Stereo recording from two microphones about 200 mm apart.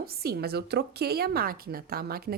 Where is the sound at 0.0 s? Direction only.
50° right (ahead or behind).